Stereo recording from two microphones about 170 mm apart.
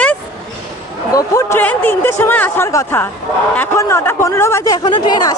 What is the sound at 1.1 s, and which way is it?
A woman's voice, 20° left (ahead or behind).